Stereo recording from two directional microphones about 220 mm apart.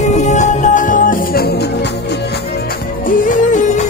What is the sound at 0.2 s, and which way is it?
Music, 35° left (ahead or behind).